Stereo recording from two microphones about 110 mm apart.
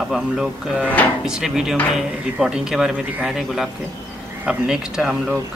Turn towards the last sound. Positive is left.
turn(degrees=-5)  # may be behind; listen again after turning